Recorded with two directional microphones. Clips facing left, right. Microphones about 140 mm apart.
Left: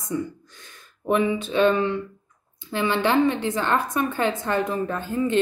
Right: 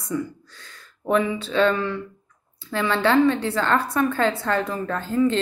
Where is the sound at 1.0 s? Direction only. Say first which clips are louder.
Even; 20° left (ahead or behind).